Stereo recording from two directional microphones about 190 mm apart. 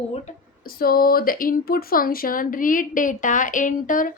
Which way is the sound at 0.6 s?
50° left (ahead or behind).